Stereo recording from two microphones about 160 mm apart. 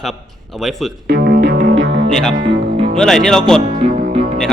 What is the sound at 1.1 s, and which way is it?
Music, 80° right.